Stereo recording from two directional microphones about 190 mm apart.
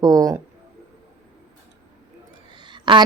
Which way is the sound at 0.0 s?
20° right (ahead or behind).